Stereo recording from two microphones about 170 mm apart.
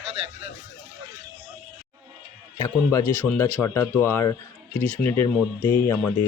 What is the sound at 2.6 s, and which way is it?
Speech, 15° left (ahead or behind).